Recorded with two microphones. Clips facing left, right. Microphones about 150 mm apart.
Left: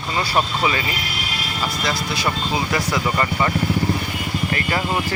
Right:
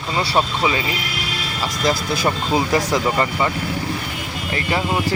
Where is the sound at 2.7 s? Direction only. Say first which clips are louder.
Right 3 dB; 20° right (ahead or behind).